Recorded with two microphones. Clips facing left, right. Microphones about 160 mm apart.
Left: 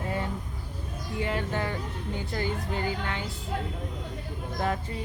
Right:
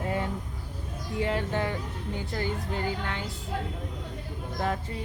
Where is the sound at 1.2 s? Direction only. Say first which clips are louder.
Right 2 dB; 30° right (ahead or behind).